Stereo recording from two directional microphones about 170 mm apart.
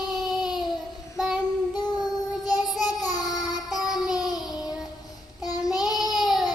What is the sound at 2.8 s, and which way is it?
Child singing, 20° left (ahead or behind).